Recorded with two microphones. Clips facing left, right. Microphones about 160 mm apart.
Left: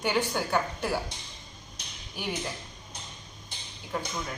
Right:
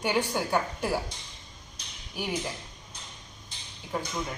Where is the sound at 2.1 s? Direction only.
10° right (ahead or behind).